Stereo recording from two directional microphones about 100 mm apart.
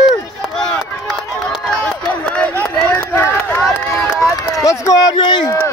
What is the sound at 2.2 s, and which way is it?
Run, 15° left (ahead or behind).